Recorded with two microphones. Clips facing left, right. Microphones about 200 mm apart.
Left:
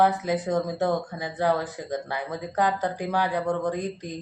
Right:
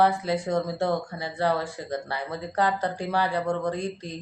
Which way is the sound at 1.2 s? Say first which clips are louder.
Left 1 dB; 15° left (ahead or behind).